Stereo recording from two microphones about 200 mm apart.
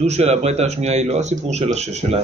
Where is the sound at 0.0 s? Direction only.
35° right (ahead or behind).